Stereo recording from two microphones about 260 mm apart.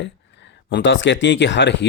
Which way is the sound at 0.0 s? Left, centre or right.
Left.